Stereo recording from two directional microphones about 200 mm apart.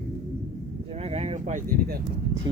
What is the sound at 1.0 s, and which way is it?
Speech, 30° right (ahead or behind).